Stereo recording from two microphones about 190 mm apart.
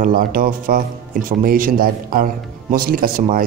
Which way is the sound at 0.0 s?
50° right (ahead or behind).